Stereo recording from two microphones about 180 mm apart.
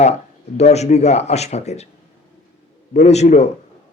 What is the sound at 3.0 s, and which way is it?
Speech, 40° left (ahead or behind).